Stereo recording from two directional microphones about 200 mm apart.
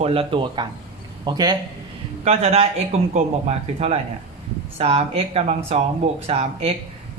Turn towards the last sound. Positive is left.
turn(degrees=-30)  # may be behind; listen again after turning